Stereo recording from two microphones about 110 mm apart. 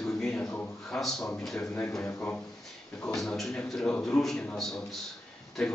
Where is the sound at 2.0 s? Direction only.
25° left (ahead or behind).